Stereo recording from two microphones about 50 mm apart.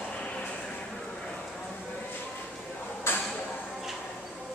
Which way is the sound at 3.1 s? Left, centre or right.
Left.